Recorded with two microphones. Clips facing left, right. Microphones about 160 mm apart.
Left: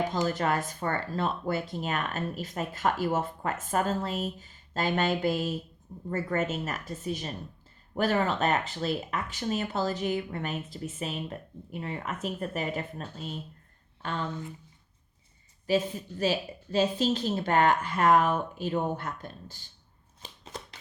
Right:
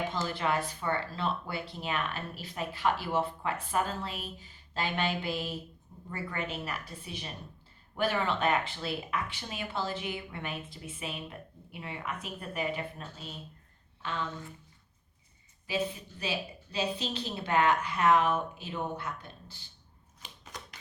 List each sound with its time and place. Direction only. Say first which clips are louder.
0.3 s speech: left 3 dB; 45° left (ahead or behind)
15.6 s speech: left 6 dB; 45° left (ahead or behind)
20.2 s shuffling cards: left 4 dB; 30° left (ahead or behind)